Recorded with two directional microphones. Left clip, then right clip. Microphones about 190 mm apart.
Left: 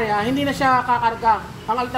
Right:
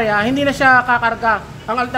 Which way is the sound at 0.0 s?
30° right (ahead or behind).